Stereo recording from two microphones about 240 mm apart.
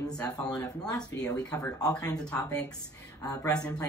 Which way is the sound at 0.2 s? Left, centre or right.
Centre.